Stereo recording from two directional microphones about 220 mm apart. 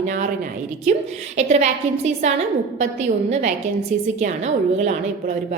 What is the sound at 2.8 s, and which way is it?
A woman's voice, 30° right (ahead or behind).